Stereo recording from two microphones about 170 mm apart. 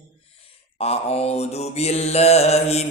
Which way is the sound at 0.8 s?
35° left (ahead or behind).